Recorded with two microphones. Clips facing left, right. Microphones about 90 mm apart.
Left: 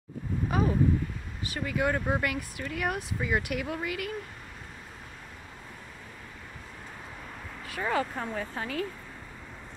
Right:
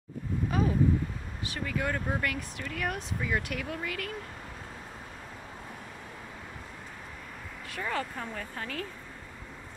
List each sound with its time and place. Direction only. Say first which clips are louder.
0.5 s a sound: left 2 dB; 5° left (ahead or behind)
1.4 s speech: left 2 dB; 5° left (ahead or behind)
1.8 s speech: left 4 dB; 15° left (ahead or behind)
7.9 s speech: left 5 dB; 15° left (ahead or behind)